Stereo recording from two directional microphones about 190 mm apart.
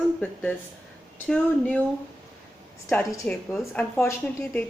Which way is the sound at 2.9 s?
5° left (ahead or behind).